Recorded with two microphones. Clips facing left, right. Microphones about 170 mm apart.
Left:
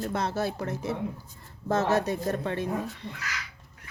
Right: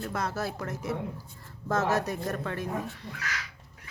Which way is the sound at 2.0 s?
25° left (ahead or behind).